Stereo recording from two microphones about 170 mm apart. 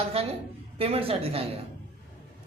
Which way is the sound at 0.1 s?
35° right (ahead or behind).